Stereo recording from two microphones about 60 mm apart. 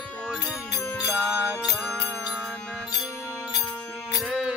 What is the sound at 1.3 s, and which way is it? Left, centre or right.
Music, centre.